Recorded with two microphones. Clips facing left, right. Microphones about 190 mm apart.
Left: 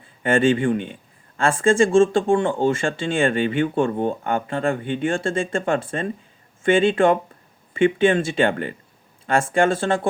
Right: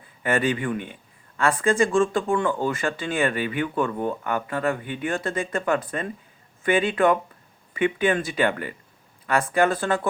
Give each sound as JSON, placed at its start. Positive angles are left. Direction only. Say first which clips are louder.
{"t": 0.2, "sound": "speech", "louder": "left 6 dB", "side_deg": 30}